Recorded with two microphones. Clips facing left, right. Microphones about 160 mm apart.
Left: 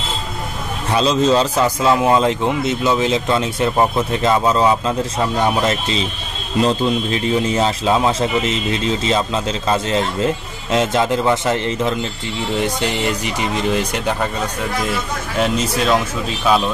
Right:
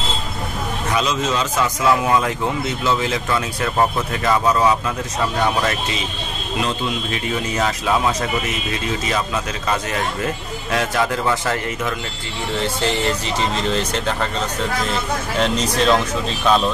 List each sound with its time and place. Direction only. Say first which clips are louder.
0.9 s a man's voice: left 7 dB; 30° left (ahead or behind); by 16.7 s 5° left (ahead or behind)